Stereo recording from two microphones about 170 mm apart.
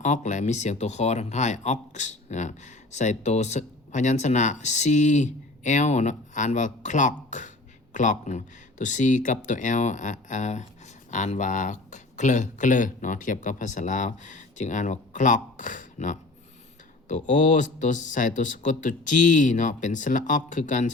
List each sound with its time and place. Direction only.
0.0 s speech: 45° left (ahead or behind)